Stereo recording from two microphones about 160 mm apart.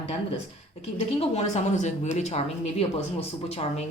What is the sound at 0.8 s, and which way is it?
Speech, 45° left (ahead or behind).